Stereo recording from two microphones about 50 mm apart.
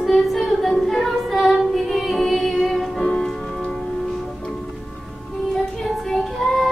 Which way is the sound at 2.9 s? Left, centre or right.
Centre.